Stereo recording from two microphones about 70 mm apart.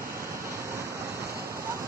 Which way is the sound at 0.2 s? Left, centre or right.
Right.